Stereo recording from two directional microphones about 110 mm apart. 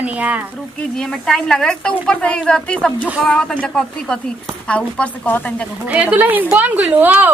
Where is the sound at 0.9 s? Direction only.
5° left (ahead or behind).